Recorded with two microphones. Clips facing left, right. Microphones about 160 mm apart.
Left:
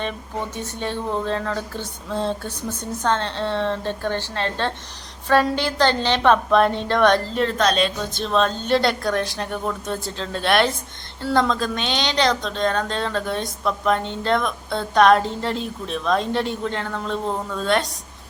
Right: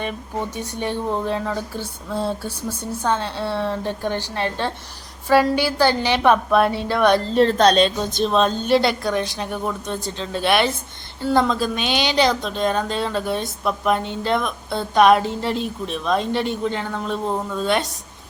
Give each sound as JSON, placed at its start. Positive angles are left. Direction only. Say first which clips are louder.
{"t": 0.0, "sound": "speech", "louder": "right 1 dB", "side_deg": -15}
{"t": 7.3, "sound": "speech", "louder": "right 5 dB", "side_deg": -35}
{"t": 8.1, "sound": "speech", "louder": "right 2 dB", "side_deg": -15}
{"t": 8.7, "sound": "a woman's voice", "louder": "right 1 dB", "side_deg": 0}